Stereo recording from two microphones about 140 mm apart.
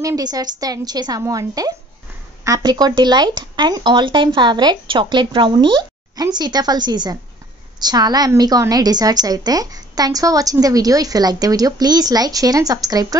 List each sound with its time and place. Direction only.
0.0 s a woman's voice: 25° right (ahead or behind)